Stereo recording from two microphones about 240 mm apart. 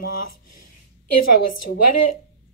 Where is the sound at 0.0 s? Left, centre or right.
Left.